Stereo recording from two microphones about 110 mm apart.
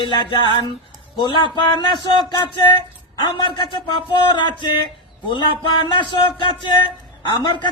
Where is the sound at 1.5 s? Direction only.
45° left (ahead or behind).